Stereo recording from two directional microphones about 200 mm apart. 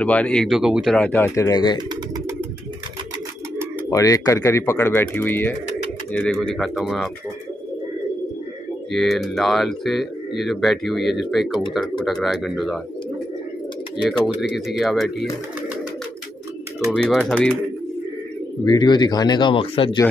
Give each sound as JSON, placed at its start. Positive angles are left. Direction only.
{"t": 0.0, "sound": "speech", "side_deg": 5}
{"t": 3.9, "sound": "speech", "side_deg": 15}
{"t": 8.9, "sound": "speech", "side_deg": 0}
{"t": 14.1, "sound": "speech", "side_deg": 0}
{"t": 16.9, "sound": "speech", "side_deg": 0}
{"t": 18.7, "sound": "speech", "side_deg": 20}